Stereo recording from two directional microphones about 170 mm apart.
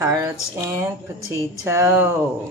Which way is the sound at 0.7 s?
15° right (ahead or behind).